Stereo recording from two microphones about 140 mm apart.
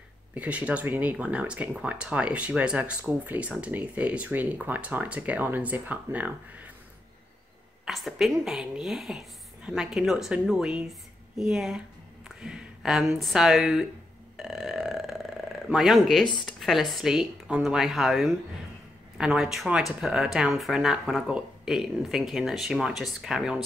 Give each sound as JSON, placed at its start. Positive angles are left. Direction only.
{"t": 0.3, "sound": "speech", "side_deg": -10}
{"t": 7.8, "sound": "speech", "side_deg": 0}
{"t": 14.3, "sound": "burping", "side_deg": 0}
{"t": 15.7, "sound": "speech", "side_deg": 0}